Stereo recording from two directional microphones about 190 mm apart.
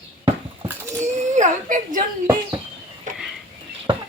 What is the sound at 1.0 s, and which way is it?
Whimper, 40° right (ahead or behind).